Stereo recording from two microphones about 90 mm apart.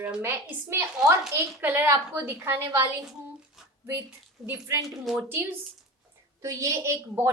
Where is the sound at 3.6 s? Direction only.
5° right (ahead or behind).